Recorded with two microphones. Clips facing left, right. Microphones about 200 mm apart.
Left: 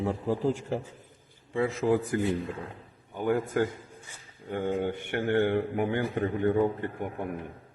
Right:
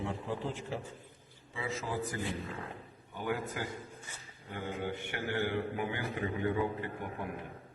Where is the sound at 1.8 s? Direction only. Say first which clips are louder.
Left 13 dB; 55° left (ahead or behind).